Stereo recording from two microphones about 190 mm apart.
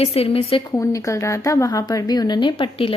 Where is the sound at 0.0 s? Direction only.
30° left (ahead or behind).